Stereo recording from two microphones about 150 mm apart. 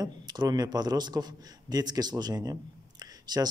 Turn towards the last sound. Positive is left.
turn(degrees=-25)  # may be behind; listen again after turning